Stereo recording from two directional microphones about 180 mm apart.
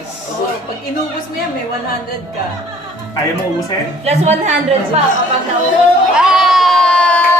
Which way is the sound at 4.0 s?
35° right (ahead or behind).